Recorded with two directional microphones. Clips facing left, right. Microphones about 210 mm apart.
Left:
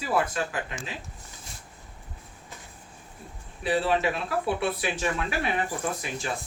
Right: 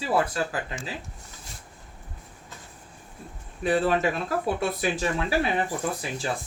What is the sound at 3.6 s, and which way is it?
Speech, 45° right (ahead or behind).